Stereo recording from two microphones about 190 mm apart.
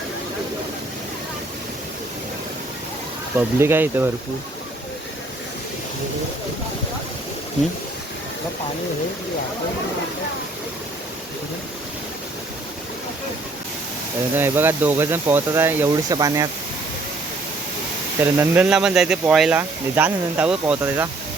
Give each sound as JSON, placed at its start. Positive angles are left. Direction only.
{"t": 3.6, "sound": "speech", "side_deg": -10}
{"t": 14.3, "sound": "speech", "side_deg": -10}
{"t": 18.2, "sound": "speech", "side_deg": -10}